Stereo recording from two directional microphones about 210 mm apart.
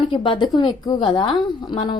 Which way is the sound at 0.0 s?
25° left (ahead or behind).